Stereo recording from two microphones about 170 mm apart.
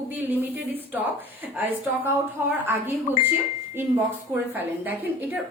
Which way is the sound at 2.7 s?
10° right (ahead or behind).